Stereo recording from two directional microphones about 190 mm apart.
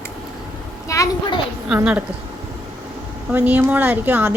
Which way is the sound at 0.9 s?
15° left (ahead or behind).